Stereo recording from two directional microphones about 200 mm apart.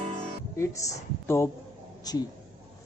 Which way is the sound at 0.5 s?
15° left (ahead or behind).